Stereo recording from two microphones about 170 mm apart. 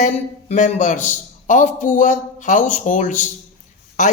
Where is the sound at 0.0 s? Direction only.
45° left (ahead or behind).